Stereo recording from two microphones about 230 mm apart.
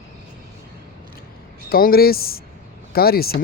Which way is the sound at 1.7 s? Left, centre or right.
Left.